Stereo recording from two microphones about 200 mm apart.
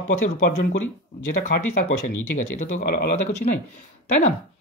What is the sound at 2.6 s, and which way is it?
Speech, 40° left (ahead or behind).